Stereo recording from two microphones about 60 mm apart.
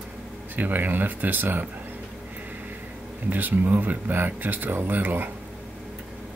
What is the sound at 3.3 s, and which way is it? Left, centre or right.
Speech, right.